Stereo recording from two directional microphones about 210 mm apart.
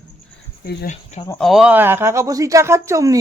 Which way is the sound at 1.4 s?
Centre (ahead or behind).